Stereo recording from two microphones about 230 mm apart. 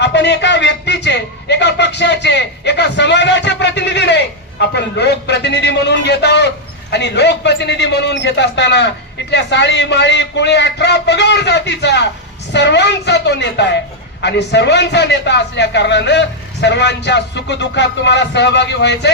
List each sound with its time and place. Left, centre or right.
0.0 s a man's voice: left